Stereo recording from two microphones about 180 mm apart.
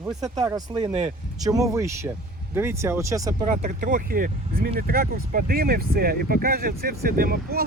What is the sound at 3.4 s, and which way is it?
Speech, 45° right (ahead or behind).